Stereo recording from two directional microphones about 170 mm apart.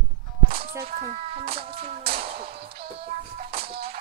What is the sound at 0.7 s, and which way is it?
Speech, 60° right (ahead or behind).